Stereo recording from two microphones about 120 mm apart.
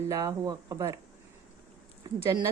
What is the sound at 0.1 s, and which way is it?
Speech, 25° right (ahead or behind).